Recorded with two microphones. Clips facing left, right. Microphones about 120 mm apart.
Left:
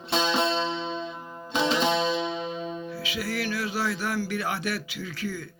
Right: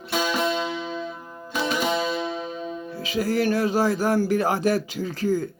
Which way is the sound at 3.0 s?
40° right (ahead or behind).